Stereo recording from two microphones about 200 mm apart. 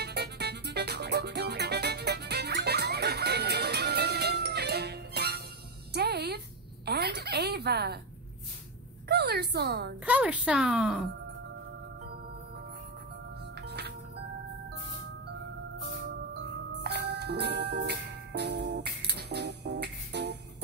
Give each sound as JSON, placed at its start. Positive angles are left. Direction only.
{"t": 0.0, "sound": "music", "side_deg": -55}
{"t": 6.9, "sound": "a sound", "side_deg": -55}
{"t": 9.1, "sound": "a woman's voice", "side_deg": -55}
{"t": 10.0, "sound": "speech", "side_deg": -5}
{"t": 13.6, "sound": "music", "side_deg": -55}
{"t": 16.8, "sound": "music", "side_deg": -55}